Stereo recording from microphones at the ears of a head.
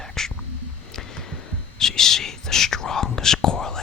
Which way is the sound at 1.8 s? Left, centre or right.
Left.